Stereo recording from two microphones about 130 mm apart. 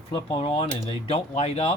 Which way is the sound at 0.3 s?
45° left (ahead or behind).